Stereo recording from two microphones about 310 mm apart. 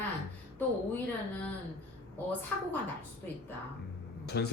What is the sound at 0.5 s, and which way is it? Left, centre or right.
Speech, centre.